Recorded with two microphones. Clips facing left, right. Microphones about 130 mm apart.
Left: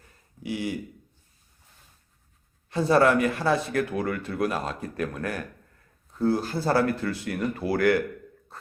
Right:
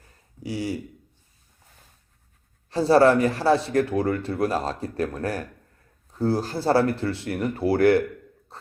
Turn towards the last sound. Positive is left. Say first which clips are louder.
# right 4 dB
turn(degrees=-30)  # may be behind; listen again after turning